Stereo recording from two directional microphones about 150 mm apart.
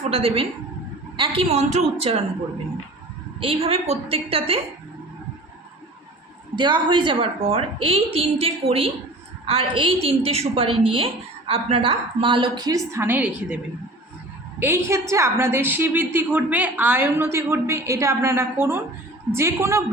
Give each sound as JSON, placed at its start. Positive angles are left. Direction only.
{"t": 0.1, "sound": "a woman's voice", "side_deg": -40}
{"t": 3.4, "sound": "a woman's voice", "side_deg": -40}
{"t": 6.6, "sound": "a woman's voice", "side_deg": -30}
{"t": 14.6, "sound": "a woman's voice", "side_deg": -15}